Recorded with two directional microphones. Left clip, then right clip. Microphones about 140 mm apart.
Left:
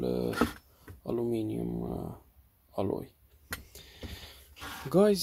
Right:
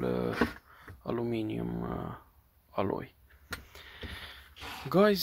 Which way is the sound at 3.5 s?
25° left (ahead or behind).